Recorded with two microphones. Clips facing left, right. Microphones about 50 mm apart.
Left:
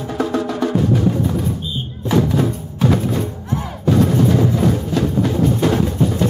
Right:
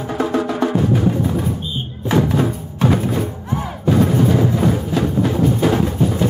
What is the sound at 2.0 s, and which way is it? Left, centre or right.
Music, centre.